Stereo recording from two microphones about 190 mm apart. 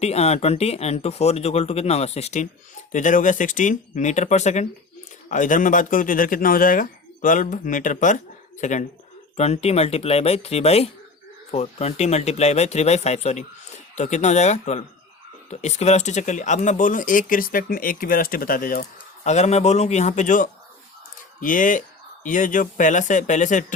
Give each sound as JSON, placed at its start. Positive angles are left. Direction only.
{"t": 0.0, "sound": "speech", "side_deg": 35}